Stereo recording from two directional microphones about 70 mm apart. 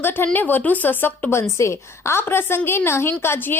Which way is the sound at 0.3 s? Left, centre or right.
Left.